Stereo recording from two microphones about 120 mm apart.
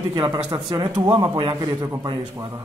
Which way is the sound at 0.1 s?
35° right (ahead or behind).